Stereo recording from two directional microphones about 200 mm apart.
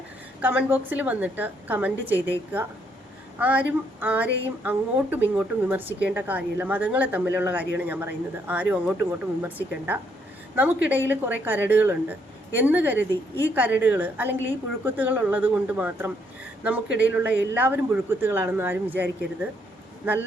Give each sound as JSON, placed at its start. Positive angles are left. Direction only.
{"t": 0.4, "sound": "a woman's voice", "side_deg": -10}